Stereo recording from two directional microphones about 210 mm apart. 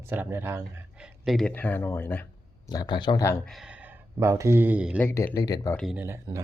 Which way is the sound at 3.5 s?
Centre (ahead or behind).